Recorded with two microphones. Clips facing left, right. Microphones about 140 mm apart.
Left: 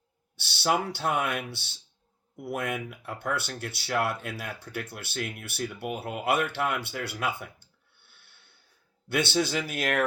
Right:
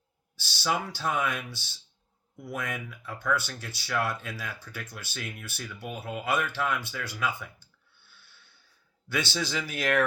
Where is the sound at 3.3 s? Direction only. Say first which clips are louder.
Right 2 dB; 60° left (ahead or behind).